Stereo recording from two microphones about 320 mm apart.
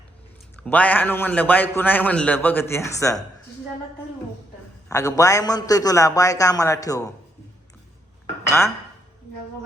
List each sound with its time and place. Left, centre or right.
0.6 s a man's voice: centre
4.9 s a man's voice: centre
8.4 s speech: centre